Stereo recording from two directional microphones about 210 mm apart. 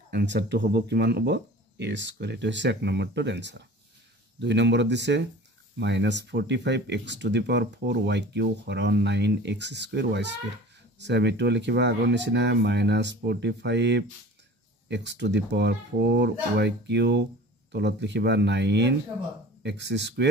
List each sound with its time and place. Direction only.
0.1 s speech: 55° right (ahead or behind)